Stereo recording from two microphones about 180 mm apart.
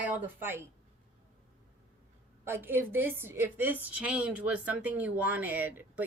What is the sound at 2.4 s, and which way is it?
A woman's voice, 10° right (ahead or behind).